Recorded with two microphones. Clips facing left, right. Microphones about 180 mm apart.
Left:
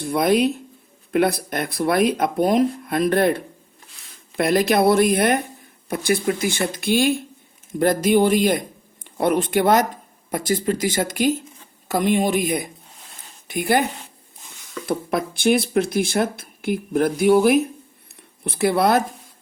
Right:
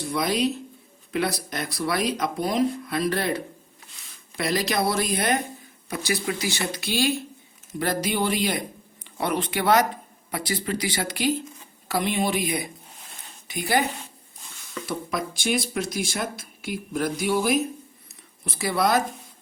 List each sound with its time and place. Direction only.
0.0 s speech: 55° left (ahead or behind)
14.8 s speech: 55° left (ahead or behind)